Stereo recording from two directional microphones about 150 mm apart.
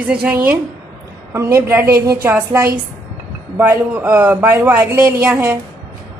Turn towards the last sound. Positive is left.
turn(degrees=-15)  # may be behind; listen again after turning